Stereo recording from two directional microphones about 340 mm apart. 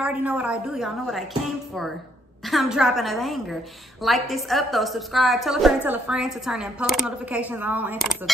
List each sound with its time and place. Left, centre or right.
0.0 s a woman's voice: centre
2.4 s a woman's voice: centre